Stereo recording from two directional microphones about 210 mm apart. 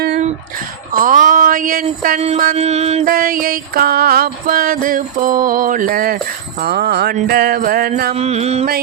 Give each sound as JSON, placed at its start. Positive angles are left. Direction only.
{"t": 0.9, "sound": "speech", "side_deg": -40}
{"t": 2.6, "sound": "mantra", "side_deg": -30}
{"t": 3.1, "sound": "music", "side_deg": -45}
{"t": 8.1, "sound": "mantra", "side_deg": -30}